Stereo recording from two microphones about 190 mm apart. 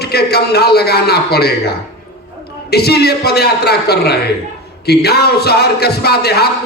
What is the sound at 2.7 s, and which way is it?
Speech, 55° left (ahead or behind).